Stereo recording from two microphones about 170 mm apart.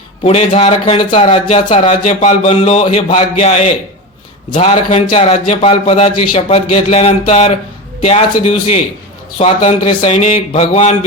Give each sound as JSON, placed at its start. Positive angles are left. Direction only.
{"t": 0.2, "sound": "speech", "side_deg": 35}